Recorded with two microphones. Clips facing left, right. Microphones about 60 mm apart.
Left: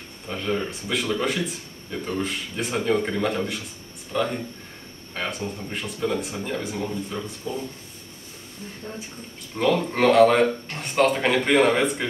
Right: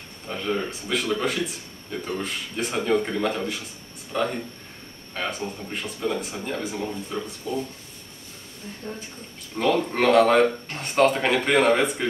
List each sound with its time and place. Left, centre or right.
0.3 s speech: centre
5.1 s speech: centre
8.8 s speech: centre